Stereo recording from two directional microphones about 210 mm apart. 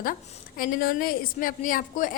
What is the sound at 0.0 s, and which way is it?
A woman's voice, 40° left (ahead or behind).